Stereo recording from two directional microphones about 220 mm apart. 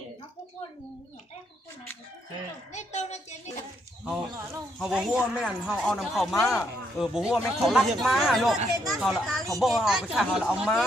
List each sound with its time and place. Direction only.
2.7 s a child's voice: 30° left (ahead or behind)
4.0 s speech: 5° right (ahead or behind)